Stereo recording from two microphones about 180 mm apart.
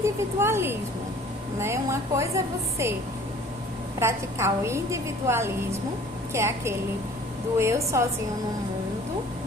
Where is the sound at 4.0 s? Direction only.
15° right (ahead or behind).